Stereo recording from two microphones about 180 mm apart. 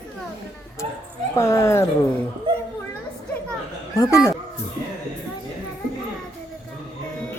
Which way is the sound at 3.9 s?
15° left (ahead or behind).